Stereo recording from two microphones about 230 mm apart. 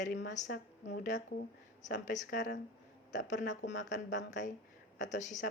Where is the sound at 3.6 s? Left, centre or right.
Left.